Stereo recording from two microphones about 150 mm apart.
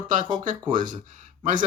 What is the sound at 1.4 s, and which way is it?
Speech, 55° right (ahead or behind).